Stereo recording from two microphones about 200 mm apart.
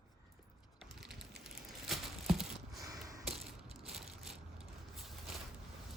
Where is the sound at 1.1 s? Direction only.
55° right (ahead or behind).